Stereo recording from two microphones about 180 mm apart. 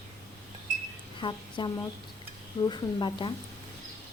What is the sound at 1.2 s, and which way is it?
A woman's voice, 25° left (ahead or behind).